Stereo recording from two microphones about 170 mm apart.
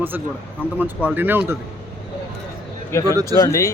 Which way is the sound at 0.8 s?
10° right (ahead or behind).